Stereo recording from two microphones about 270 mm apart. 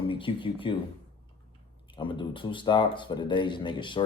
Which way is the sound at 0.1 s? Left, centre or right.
Centre.